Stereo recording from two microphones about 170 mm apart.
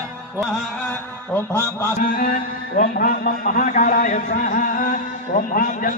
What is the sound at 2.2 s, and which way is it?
A man's voice, 55° left (ahead or behind).